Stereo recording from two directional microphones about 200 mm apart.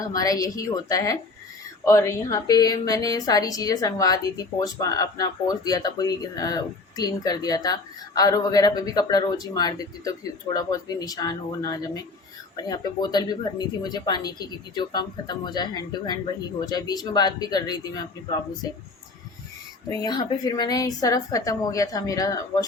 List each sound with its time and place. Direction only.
0.0 s a woman's voice: 15° left (ahead or behind)
19.9 s speech: 20° left (ahead or behind)